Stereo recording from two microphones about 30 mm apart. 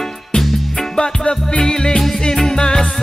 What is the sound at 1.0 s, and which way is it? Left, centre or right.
Music, left.